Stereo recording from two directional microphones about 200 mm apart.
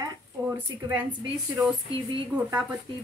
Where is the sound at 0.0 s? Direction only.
15° right (ahead or behind).